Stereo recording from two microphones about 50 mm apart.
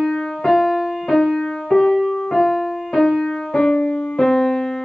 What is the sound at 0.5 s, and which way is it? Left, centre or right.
Music, centre.